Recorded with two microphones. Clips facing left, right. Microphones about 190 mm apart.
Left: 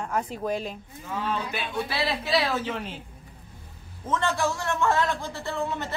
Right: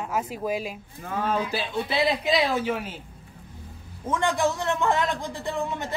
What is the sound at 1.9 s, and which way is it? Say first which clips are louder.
Speech: right 4 dB; 20° right (ahead or behind).